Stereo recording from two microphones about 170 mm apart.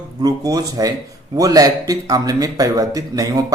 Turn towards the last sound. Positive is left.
turn(degrees=-20)  # may be behind; listen again after turning